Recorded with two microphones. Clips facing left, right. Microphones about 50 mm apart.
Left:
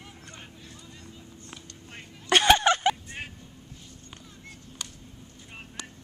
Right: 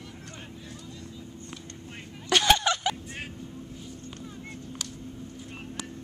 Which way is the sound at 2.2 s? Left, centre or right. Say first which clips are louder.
Left 3 dB; left.